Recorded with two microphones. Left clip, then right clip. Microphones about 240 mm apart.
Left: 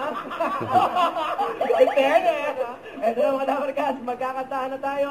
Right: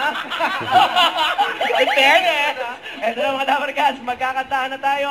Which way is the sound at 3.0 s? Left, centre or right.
Centre.